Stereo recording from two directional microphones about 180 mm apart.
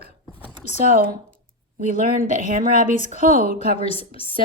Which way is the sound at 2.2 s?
40° left (ahead or behind).